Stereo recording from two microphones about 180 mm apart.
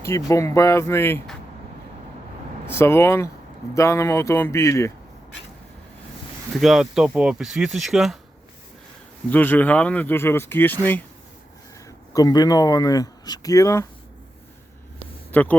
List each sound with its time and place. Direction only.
0.0 s speech: 15° left (ahead or behind)
2.6 s speech: 15° left (ahead or behind)
6.5 s speech: centre (ahead or behind)
9.3 s speech: 10° left (ahead or behind)
12.1 s speech: 20° left (ahead or behind)
15.3 s speech: 10° left (ahead or behind)